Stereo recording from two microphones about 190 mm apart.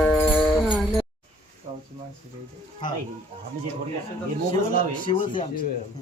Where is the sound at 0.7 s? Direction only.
5° right (ahead or behind).